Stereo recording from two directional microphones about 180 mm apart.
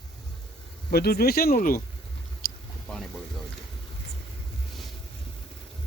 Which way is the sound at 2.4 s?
50° left (ahead or behind).